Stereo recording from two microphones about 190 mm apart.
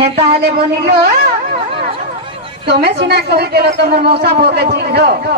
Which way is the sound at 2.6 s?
60° right (ahead or behind).